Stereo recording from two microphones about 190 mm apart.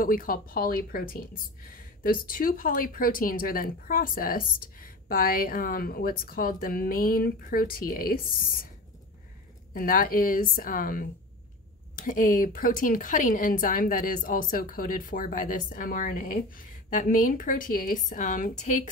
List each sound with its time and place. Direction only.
0.0 s a woman's voice: 45° left (ahead or behind)
9.8 s a woman's voice: 50° left (ahead or behind)